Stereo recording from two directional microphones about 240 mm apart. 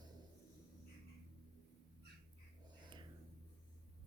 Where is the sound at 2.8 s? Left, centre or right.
Centre.